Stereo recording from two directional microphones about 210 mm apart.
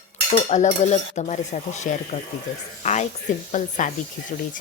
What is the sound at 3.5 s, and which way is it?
Cutlery, 35° left (ahead or behind).